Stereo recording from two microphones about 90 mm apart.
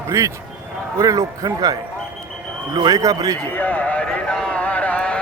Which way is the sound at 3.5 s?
15° left (ahead or behind).